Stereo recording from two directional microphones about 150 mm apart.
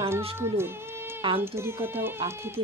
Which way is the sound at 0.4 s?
15° right (ahead or behind).